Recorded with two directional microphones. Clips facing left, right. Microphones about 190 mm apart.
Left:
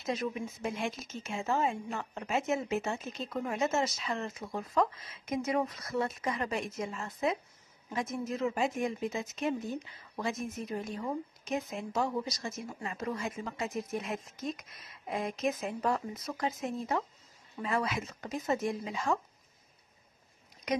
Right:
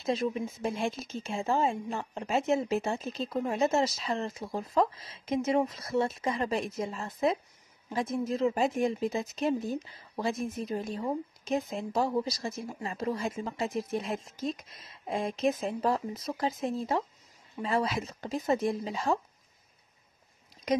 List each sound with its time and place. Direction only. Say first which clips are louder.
0.0 s speech: right 4 dB; 30° right (ahead or behind)